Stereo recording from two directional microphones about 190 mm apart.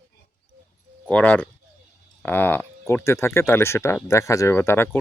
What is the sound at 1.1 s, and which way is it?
Speech, 5° left (ahead or behind).